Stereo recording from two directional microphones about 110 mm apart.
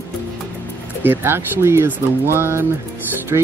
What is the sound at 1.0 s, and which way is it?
Speech, 20° right (ahead or behind).